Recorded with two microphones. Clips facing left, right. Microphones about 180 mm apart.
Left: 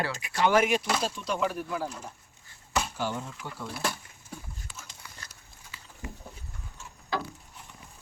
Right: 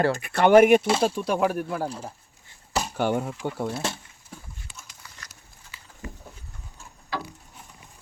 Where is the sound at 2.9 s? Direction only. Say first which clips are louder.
Right 8 dB; 60° right (ahead or behind).